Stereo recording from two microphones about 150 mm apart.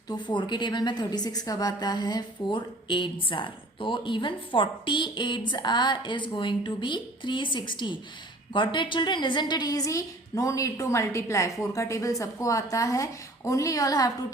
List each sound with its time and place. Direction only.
0.1 s a woman's voice: 30° left (ahead or behind)